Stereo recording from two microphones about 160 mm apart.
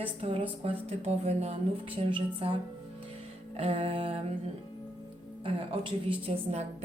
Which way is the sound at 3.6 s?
35° right (ahead or behind).